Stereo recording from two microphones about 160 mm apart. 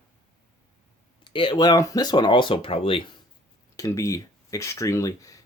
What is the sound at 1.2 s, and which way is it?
Speech, 30° left (ahead or behind).